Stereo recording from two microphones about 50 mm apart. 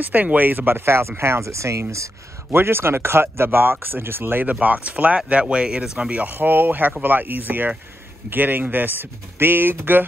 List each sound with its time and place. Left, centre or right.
0.0 s speech: right
2.5 s speech: right
4.5 s speech: right
6.2 s speech: right